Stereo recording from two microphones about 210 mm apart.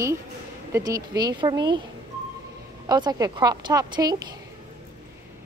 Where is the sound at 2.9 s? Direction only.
20° right (ahead or behind).